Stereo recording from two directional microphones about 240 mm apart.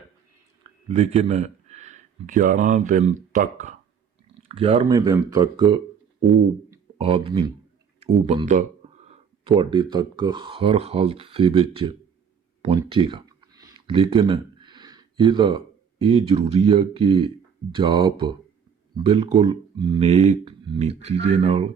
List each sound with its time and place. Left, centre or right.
0.6 s speech: right
7.0 s speech: right